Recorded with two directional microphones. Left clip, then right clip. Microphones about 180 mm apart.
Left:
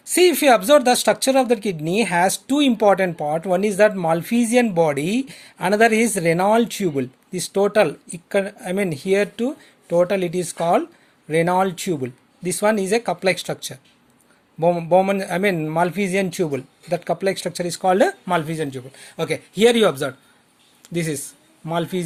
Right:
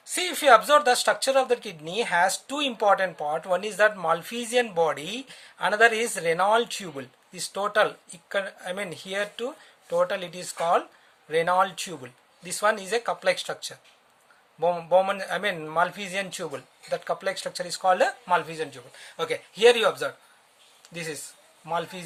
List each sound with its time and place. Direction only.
0.1 s speech: 35° left (ahead or behind)